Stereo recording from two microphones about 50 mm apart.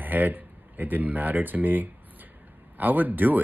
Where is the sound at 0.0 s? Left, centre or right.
Right.